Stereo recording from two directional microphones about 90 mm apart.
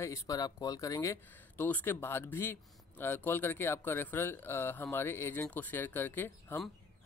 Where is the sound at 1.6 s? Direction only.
20° left (ahead or behind).